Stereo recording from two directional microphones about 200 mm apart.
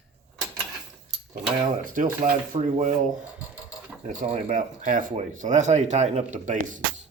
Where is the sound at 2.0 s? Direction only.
40° right (ahead or behind).